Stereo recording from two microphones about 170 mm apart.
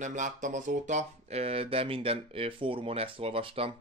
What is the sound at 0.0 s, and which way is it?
Speech, 45° right (ahead or behind).